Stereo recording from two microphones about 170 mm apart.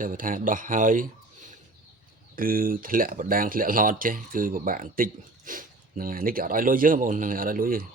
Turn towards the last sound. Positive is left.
turn(degrees=-55)  # may be behind; listen again after turning